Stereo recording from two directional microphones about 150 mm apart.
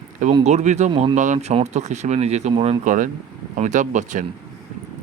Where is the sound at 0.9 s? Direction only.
35° right (ahead or behind).